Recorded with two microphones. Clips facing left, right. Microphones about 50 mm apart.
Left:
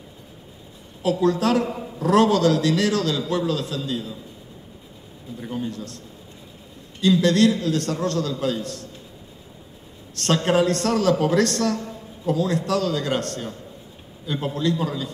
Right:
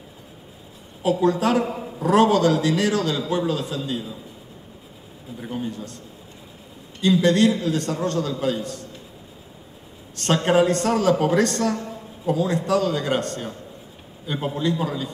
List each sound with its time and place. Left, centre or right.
1.2 s a man's voice: right
1.7 s a man's voice: centre
5.4 s a man's voice: centre
7.0 s a man's voice: centre
10.1 s a man's voice: centre